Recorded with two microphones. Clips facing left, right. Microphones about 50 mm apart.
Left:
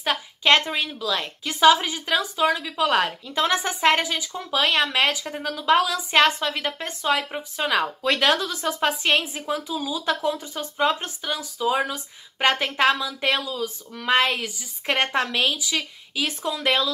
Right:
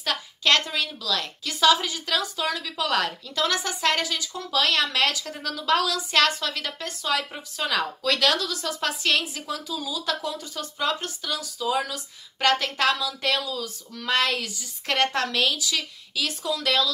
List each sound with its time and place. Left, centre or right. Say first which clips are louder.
0.0 s a woman's voice: left 3 dB; left